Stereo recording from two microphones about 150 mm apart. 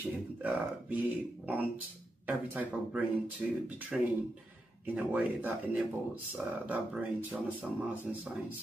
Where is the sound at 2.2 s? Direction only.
10° right (ahead or behind).